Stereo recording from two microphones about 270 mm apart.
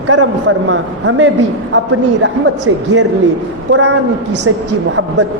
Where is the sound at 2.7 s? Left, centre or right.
Right.